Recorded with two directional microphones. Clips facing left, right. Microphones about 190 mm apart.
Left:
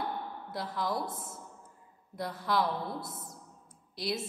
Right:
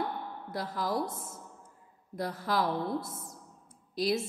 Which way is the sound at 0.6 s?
45° right (ahead or behind).